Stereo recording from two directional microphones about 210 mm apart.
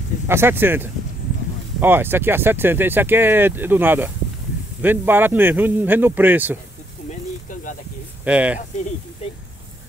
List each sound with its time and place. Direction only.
0.3 s speech: 10° right (ahead or behind)
7.1 s snake: 40° left (ahead or behind)
8.2 s speech: 5° right (ahead or behind)